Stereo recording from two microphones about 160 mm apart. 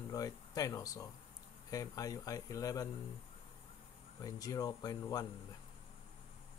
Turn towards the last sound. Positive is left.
turn(degrees=25)  # may be behind; listen again after turning